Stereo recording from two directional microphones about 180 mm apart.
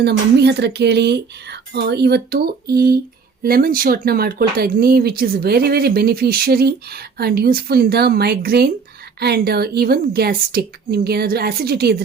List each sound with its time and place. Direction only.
0.0 s speech: 65° right (ahead or behind)